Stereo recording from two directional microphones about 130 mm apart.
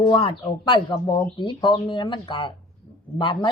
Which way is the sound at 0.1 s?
40° left (ahead or behind).